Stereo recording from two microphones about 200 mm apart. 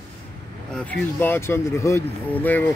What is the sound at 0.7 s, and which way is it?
Speech, 10° left (ahead or behind).